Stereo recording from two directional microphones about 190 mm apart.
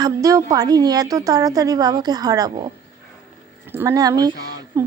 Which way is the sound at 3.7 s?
15° right (ahead or behind).